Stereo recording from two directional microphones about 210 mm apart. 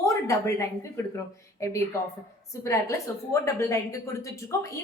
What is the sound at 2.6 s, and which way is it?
A woman's voice, 15° left (ahead or behind).